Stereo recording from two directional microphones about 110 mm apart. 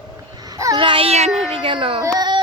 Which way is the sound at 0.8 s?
50° right (ahead or behind).